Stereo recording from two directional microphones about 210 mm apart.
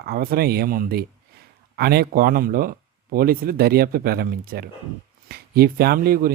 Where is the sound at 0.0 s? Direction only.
45° right (ahead or behind).